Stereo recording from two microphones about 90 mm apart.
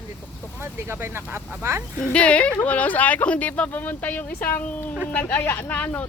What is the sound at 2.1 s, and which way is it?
Speech, 15° left (ahead or behind).